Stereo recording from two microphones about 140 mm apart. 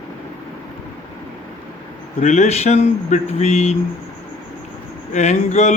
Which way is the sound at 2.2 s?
55° left (ahead or behind).